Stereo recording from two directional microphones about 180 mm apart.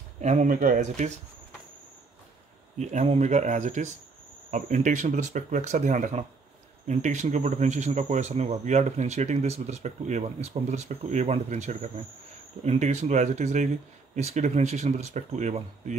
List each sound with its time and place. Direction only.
0.2 s speech: 40° right (ahead or behind)
2.8 s speech: 40° right (ahead or behind)